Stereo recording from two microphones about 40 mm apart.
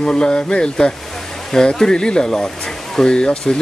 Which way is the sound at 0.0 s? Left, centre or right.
Left.